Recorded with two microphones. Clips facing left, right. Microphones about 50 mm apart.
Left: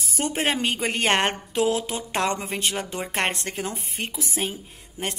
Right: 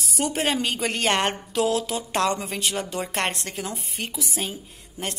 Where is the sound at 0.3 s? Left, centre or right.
Left.